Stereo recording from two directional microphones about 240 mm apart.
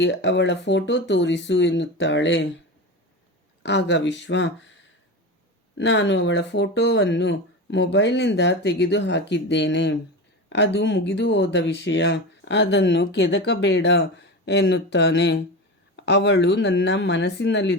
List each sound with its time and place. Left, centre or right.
0.0 s speech: left
3.6 s speech: left
5.7 s speech: left